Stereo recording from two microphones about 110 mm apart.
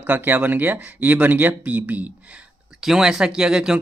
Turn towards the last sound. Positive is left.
turn(degrees=-5)  # may be behind; listen again after turning